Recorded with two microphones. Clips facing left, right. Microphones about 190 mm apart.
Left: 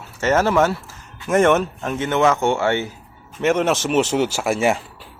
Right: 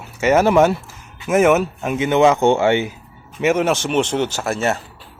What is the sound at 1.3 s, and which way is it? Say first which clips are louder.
Speech: right 1 dB; 5° right (ahead or behind).